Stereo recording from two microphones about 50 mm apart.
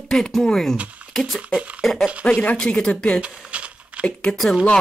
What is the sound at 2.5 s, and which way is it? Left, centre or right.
Speech, centre.